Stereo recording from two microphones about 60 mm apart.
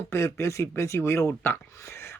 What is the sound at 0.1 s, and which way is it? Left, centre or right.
A man's voice, left.